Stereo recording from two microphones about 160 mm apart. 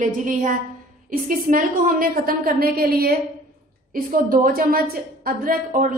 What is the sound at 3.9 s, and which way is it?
A woman's voice, 60° right (ahead or behind).